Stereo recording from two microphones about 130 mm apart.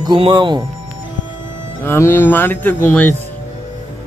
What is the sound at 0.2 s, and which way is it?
Speech, 35° right (ahead or behind).